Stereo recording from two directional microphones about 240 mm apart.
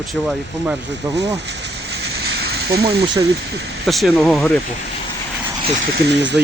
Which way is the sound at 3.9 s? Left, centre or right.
Centre.